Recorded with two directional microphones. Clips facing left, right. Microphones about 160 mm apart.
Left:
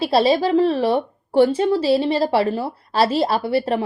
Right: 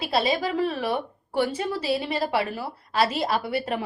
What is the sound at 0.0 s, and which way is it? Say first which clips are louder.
A woman's voice: left 8 dB; 30° left (ahead or behind).